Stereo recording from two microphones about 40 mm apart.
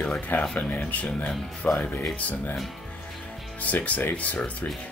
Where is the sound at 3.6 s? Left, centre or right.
Left.